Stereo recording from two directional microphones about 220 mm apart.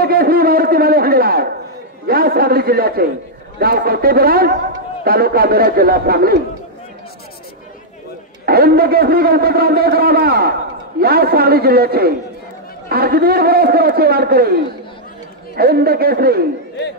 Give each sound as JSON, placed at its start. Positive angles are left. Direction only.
{"t": 0.0, "sound": "a sound", "side_deg": -45}
{"t": 2.0, "sound": "a man's voice", "side_deg": -45}
{"t": 8.5, "sound": "a man's voice", "side_deg": -45}